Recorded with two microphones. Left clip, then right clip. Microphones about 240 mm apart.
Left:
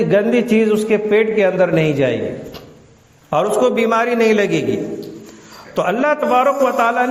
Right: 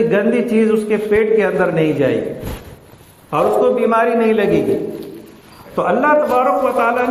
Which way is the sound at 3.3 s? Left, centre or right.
Left.